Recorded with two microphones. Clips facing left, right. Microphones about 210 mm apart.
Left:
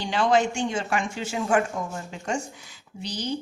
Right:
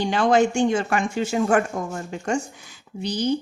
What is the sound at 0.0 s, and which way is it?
A woman's voice, 50° right (ahead or behind).